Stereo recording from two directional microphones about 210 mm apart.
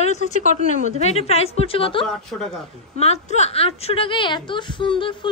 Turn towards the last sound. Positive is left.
turn(degrees=25)  # may be behind; listen again after turning